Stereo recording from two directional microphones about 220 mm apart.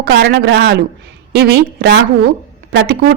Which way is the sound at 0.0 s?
50° right (ahead or behind).